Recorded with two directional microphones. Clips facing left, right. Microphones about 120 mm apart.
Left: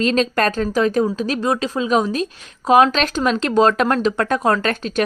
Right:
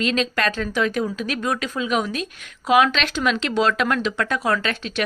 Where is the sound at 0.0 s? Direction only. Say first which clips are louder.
Left 5 dB; 40° left (ahead or behind).